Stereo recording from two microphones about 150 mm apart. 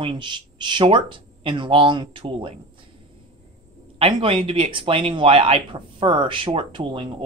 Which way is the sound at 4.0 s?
35° right (ahead or behind).